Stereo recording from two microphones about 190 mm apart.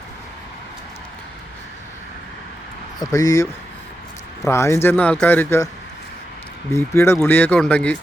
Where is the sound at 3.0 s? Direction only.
20° left (ahead or behind).